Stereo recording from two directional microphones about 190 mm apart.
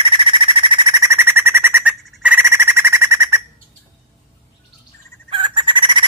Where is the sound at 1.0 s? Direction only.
10° right (ahead or behind).